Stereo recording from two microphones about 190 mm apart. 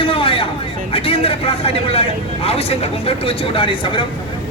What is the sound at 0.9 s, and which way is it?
Speech, 30° left (ahead or behind).